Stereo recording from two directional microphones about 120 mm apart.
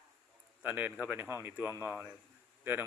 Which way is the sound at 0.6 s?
15° right (ahead or behind).